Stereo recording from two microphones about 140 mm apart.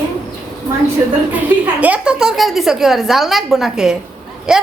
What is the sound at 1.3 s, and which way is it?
A woman's voice, 10° right (ahead or behind).